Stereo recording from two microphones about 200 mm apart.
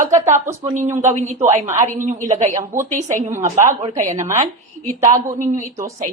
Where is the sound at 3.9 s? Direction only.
35° right (ahead or behind).